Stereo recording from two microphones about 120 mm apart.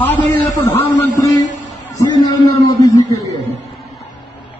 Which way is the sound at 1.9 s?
30° left (ahead or behind).